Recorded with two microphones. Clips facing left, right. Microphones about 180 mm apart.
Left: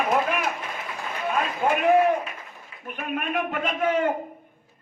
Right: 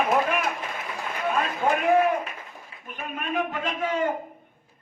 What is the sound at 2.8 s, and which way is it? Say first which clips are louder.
A man's voice: left 4 dB; 60° left (ahead or behind).